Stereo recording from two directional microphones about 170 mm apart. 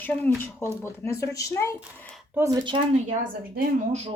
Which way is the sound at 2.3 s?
20° right (ahead or behind).